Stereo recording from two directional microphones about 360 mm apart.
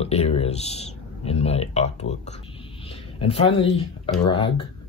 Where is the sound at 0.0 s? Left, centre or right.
Centre.